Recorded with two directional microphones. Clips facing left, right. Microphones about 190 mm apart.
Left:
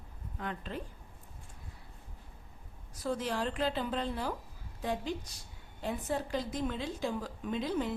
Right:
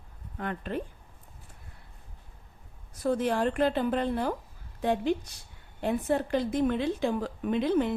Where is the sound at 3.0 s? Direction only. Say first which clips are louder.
Right 7 dB; 55° right (ahead or behind).